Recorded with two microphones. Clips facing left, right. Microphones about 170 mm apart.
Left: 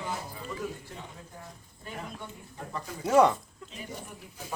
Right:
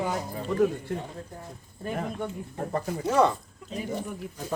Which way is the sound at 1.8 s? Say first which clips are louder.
Right 9 dB; 50° right (ahead or behind).